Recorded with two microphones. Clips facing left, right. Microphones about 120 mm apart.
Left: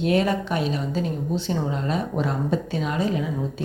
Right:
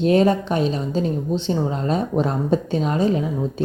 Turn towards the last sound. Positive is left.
turn(degrees=-30)  # may be behind; listen again after turning